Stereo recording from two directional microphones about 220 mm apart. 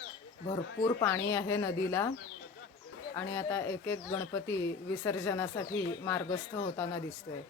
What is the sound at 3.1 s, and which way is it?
A woman's voice, 10° left (ahead or behind).